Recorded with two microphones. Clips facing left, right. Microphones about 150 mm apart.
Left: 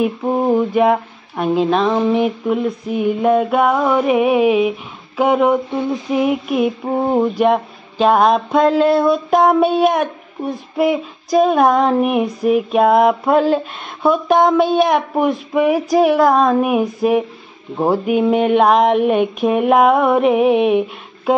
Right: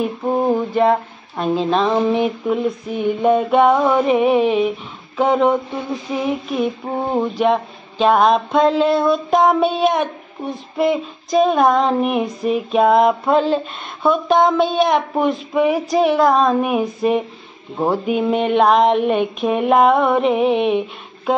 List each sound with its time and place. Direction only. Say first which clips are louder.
0.0 s speech: left 2 dB; 10° left (ahead or behind)